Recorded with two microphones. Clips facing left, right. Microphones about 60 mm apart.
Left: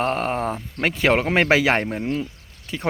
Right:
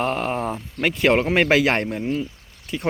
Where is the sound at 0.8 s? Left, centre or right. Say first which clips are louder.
Right 1 dB; left.